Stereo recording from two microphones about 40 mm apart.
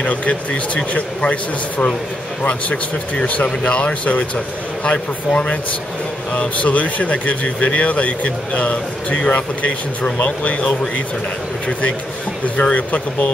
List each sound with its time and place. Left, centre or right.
0.0 s speech: left
12.5 s speech: left